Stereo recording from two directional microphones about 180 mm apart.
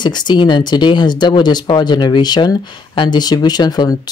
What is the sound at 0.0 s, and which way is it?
Speech, 25° left (ahead or behind).